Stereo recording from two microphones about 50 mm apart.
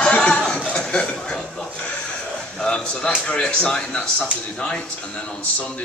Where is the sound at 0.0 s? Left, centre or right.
Centre.